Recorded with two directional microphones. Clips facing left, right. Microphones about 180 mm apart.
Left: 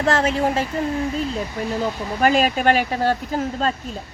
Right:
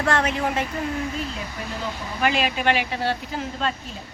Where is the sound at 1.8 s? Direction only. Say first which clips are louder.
Left 4 dB; 40° left (ahead or behind).